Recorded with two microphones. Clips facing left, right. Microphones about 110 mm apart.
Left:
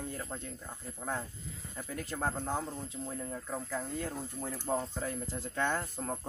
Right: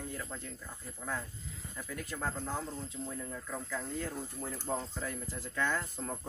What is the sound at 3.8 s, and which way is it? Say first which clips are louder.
Speech: left 1 dB; 20° left (ahead or behind).